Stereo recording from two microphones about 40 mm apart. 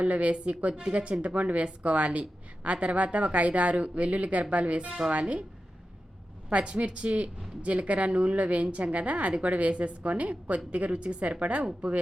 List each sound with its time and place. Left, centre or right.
0.0 s a woman's voice: right
6.5 s speech: right